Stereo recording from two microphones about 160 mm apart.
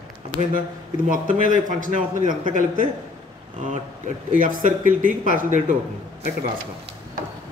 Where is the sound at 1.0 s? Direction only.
60° right (ahead or behind).